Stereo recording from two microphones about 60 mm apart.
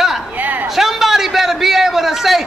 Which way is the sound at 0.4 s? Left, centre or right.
Right.